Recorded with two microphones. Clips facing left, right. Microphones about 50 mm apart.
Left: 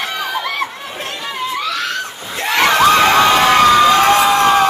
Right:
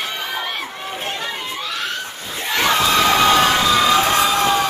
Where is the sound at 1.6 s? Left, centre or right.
Left.